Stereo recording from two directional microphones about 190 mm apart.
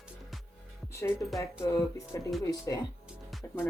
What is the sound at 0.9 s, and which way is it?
Speech, 15° left (ahead or behind).